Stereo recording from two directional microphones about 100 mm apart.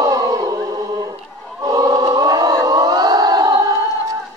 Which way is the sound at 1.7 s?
40° right (ahead or behind).